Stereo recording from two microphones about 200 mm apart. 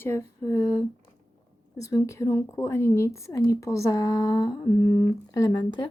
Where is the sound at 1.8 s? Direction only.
15° left (ahead or behind).